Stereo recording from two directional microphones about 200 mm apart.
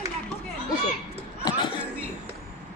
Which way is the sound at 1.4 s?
20° left (ahead or behind).